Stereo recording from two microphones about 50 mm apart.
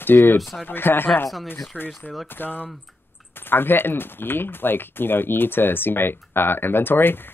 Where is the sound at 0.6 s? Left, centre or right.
Left.